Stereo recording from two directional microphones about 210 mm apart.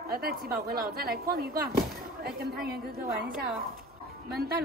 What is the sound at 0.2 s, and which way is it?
A woman's voice, 45° right (ahead or behind).